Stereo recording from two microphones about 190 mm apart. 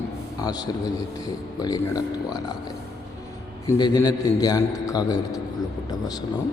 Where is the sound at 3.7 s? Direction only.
20° left (ahead or behind).